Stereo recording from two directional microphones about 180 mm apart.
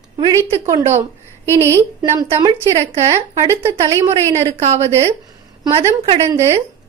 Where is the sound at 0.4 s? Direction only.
15° right (ahead or behind).